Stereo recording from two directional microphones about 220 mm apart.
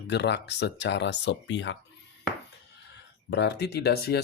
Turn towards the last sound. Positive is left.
turn(degrees=45)  # may be behind; listen again after turning